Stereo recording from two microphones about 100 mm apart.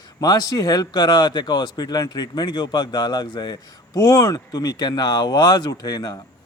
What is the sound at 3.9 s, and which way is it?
Speech, 35° left (ahead or behind).